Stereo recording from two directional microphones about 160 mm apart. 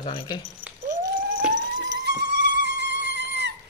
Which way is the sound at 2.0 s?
90° right.